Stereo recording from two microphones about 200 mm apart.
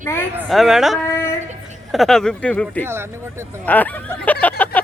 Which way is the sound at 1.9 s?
Centre (ahead or behind).